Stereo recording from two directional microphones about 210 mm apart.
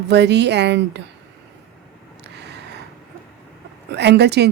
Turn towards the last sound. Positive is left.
turn(degrees=-55)  # may be behind; listen again after turning